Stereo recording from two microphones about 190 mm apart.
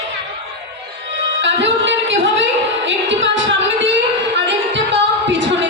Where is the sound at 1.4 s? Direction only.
70° right (ahead or behind).